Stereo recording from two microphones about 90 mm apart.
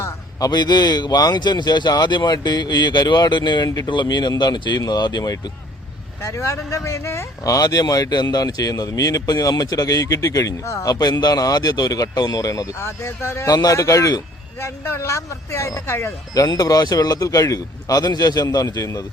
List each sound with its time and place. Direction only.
0.3 s a man's voice: 45° left (ahead or behind)
6.2 s speech: 35° left (ahead or behind)
13.5 s a man's voice: 50° left (ahead or behind)
13.7 s speech: 35° left (ahead or behind)
16.3 s a man's voice: 45° left (ahead or behind)